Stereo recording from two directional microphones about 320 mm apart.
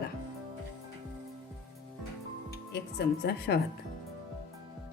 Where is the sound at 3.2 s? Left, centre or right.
Left.